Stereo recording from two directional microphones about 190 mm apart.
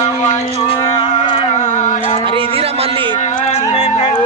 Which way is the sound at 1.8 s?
40° left (ahead or behind).